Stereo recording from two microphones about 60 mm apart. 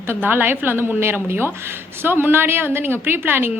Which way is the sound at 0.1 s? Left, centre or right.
Right.